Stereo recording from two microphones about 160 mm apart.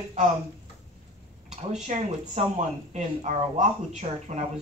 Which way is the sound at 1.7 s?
45° right (ahead or behind).